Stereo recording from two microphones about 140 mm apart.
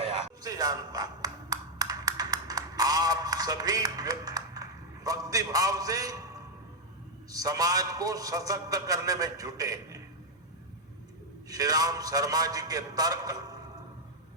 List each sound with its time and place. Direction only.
0.4 s a sound: 25° right (ahead or behind)
7.3 s a man's voice: 25° right (ahead or behind)
11.4 s a man's voice: 25° right (ahead or behind)